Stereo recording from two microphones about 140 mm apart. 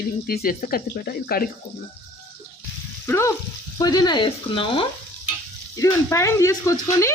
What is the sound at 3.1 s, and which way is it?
Speech, 20° left (ahead or behind).